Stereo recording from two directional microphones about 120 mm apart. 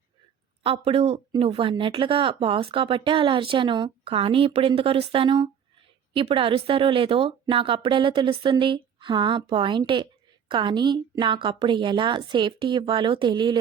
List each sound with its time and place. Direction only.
0.6 s a woman's voice: 55° right (ahead or behind)